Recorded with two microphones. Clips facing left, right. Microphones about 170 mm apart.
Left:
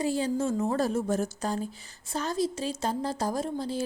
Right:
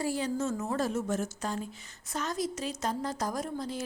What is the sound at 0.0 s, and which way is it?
A woman's voice, 25° left (ahead or behind).